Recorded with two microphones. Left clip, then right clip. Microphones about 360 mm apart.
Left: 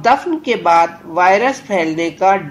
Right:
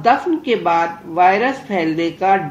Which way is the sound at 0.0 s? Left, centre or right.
Left.